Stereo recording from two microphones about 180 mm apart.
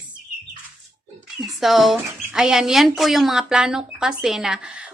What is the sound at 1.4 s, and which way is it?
Speech, centre (ahead or behind).